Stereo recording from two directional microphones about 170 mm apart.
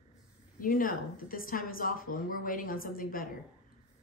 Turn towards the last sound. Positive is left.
turn(degrees=55)  # may be behind; listen again after turning